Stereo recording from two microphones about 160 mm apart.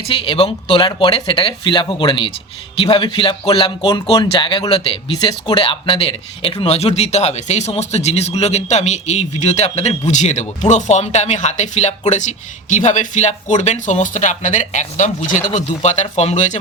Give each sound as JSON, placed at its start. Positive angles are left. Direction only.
{"t": 0.1, "sound": "speech", "side_deg": 30}